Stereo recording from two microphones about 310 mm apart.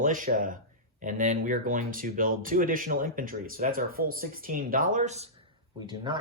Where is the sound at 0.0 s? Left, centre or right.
Right.